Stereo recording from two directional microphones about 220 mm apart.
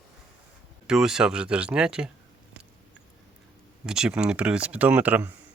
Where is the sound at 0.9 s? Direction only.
Centre (ahead or behind).